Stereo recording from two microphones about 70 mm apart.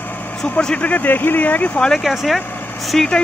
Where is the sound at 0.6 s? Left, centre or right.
Centre.